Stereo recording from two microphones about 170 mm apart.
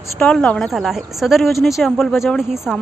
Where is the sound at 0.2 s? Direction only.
5° left (ahead or behind).